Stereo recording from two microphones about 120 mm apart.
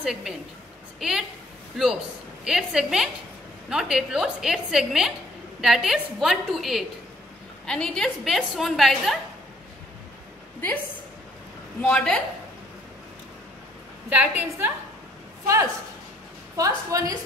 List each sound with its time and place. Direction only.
0.0 s a woman's voice: 5° right (ahead or behind)
11.8 s a woman's voice: 10° left (ahead or behind)
14.0 s a woman's voice: 15° right (ahead or behind)
15.4 s a woman's voice: 25° right (ahead or behind)